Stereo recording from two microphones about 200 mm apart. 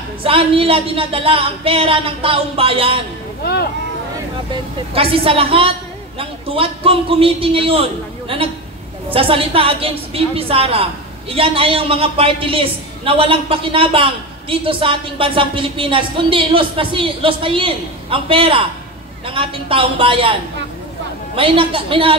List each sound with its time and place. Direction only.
0.2 s a woman's voice: 25° right (ahead or behind)
4.5 s a woman's voice: 25° right (ahead or behind)
21.4 s a woman's voice: 25° right (ahead or behind)